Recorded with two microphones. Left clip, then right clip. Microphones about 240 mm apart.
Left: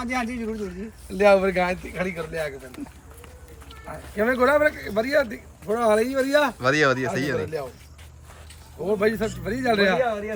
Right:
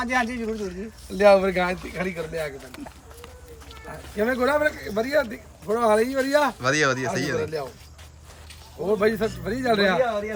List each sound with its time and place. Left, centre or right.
0.0 s speech: centre
1.1 s speech: centre
3.8 s speech: centre
8.9 s speech: centre